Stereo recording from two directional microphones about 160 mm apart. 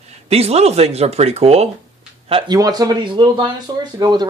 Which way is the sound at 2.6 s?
25° right (ahead or behind).